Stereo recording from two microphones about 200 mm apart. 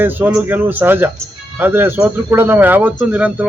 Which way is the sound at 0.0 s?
10° right (ahead or behind).